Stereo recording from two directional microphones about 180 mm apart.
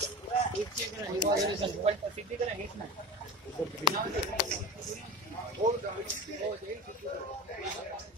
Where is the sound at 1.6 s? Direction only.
30° right (ahead or behind).